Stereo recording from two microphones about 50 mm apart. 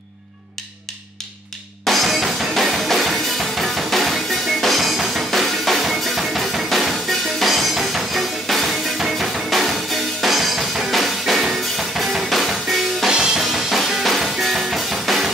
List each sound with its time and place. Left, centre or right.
1.9 s music: centre
13.1 s music: centre
13.4 s music: centre